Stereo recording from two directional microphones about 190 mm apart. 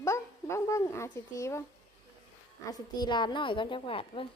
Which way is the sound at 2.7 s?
20° left (ahead or behind).